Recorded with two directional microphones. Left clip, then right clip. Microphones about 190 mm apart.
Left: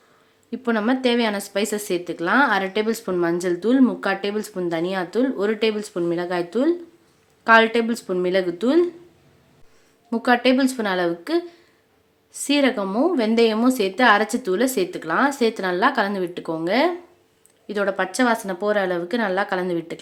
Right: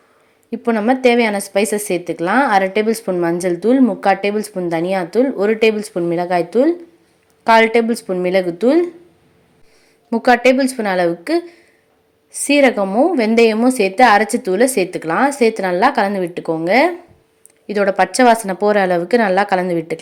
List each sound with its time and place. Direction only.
0.5 s a woman's voice: 10° right (ahead or behind)
10.1 s a woman's voice: 20° right (ahead or behind)